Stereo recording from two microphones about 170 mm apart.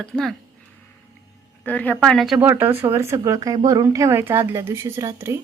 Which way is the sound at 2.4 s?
10° right (ahead or behind).